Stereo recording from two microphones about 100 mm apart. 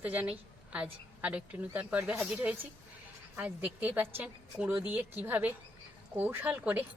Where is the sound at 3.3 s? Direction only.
15° right (ahead or behind).